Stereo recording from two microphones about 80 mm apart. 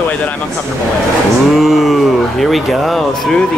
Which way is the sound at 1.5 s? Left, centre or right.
Centre.